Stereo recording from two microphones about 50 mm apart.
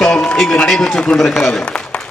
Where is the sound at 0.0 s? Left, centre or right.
Centre.